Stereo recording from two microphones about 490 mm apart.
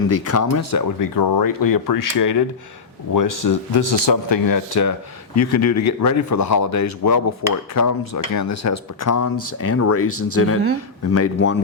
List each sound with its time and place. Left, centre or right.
0.1 s speech: left
1.1 s speech: left